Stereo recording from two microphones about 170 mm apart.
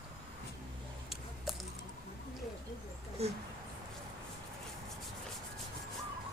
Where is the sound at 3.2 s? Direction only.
35° right (ahead or behind).